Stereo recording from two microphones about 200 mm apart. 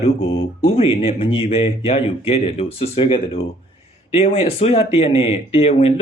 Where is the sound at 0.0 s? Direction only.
30° left (ahead or behind).